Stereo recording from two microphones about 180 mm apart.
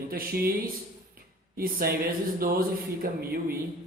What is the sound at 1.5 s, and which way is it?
Speech, 55° right (ahead or behind).